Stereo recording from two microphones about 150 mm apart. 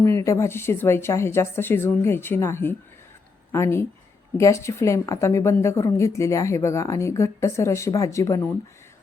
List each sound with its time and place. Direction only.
0.0 s a woman's voice: 20° left (ahead or behind)